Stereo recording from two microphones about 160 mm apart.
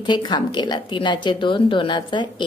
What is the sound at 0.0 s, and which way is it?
A woman's voice, 30° left (ahead or behind).